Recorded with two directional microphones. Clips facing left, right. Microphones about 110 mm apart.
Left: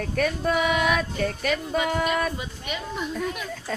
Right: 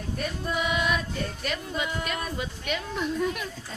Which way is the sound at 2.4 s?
5° left (ahead or behind).